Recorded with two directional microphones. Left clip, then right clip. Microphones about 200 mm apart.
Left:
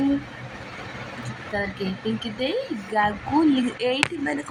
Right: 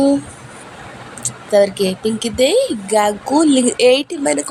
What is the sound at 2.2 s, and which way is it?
A woman's voice, 45° right (ahead or behind).